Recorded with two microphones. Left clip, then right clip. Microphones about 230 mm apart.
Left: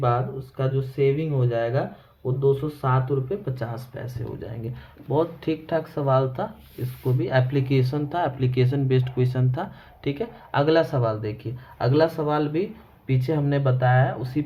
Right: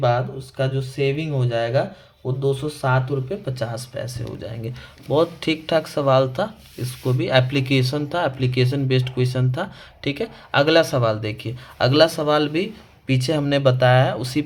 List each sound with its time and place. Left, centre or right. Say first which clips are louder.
0.0 s speech: right 4 dB; right
5.0 s speech: right 4 dB; right